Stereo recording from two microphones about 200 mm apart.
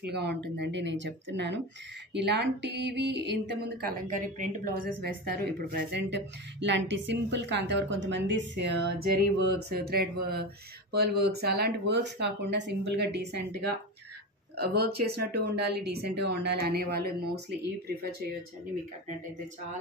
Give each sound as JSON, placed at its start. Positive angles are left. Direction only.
{"t": 0.0, "sound": "speech", "side_deg": -55}
{"t": 14.7, "sound": "speech", "side_deg": -50}